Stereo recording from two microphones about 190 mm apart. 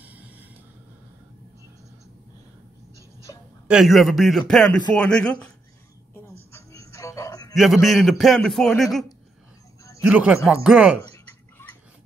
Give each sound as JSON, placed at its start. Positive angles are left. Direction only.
{"t": 0.0, "sound": "music", "side_deg": -10}
{"t": 3.3, "sound": "a sound", "side_deg": 20}
{"t": 3.6, "sound": "a man's voice", "side_deg": 0}
{"t": 6.5, "sound": "music", "side_deg": 15}
{"t": 7.5, "sound": "a man's voice", "side_deg": 0}
{"t": 10.0, "sound": "a man's voice", "side_deg": -5}